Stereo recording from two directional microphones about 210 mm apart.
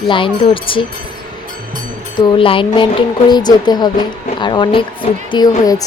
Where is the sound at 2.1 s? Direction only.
25° left (ahead or behind).